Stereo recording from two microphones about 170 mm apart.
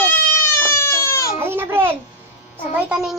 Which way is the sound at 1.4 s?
15° right (ahead or behind).